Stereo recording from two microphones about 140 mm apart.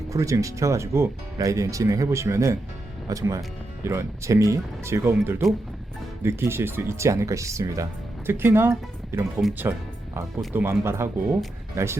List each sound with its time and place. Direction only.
0.1 s speech: 20° right (ahead or behind)
10.5 s speech: 15° right (ahead or behind)